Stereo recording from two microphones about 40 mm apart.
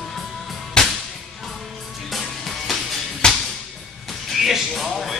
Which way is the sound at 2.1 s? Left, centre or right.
Centre.